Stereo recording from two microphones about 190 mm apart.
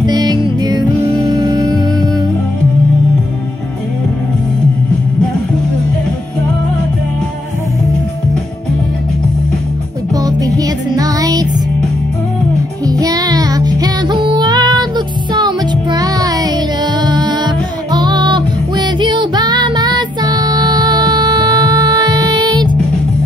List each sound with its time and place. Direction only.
0.0 s music: 20° right (ahead or behind)
10.1 s music: 20° right (ahead or behind)
12.8 s child singing: 20° right (ahead or behind)
17.0 s music: 20° right (ahead or behind)